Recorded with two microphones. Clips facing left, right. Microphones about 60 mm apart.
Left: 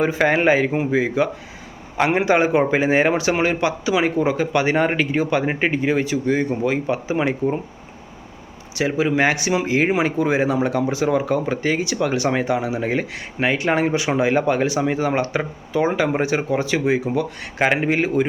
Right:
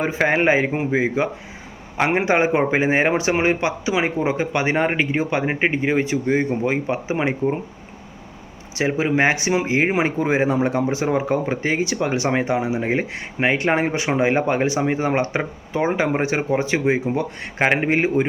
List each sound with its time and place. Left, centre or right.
0.0 s speech: right
8.7 s speech: right